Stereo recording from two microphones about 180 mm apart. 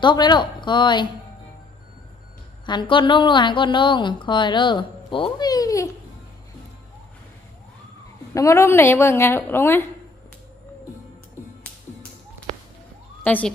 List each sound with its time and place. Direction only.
0.0 s a woman's voice: 25° left (ahead or behind)
2.6 s a woman's voice: 25° left (ahead or behind)
8.3 s a woman's voice: 15° left (ahead or behind)
13.2 s emergency vehicle: 10° left (ahead or behind)